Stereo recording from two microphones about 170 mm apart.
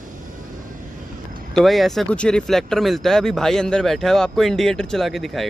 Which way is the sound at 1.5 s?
Centre (ahead or behind).